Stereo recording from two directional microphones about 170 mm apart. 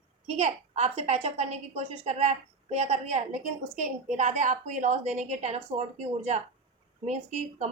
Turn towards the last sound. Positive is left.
turn(degrees=-40)  # may be behind; listen again after turning